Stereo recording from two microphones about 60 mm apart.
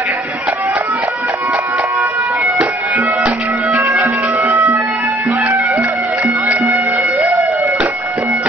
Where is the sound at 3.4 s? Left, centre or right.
Right.